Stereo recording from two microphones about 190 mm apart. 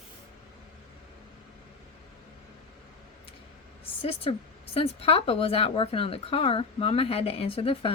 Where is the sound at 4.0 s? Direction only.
30° left (ahead or behind).